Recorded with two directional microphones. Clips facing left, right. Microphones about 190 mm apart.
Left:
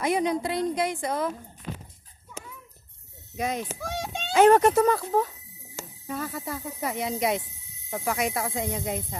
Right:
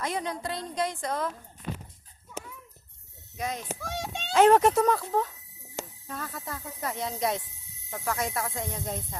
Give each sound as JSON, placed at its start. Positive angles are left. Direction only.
{"t": 0.0, "sound": "a woman's voice", "side_deg": 15}
{"t": 3.3, "sound": "a child's voice", "side_deg": 10}